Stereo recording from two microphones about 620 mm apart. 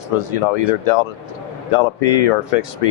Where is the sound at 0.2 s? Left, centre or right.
Left.